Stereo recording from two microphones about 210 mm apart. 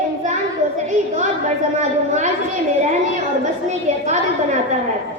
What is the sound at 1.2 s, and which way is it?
A woman's voice, 35° right (ahead or behind).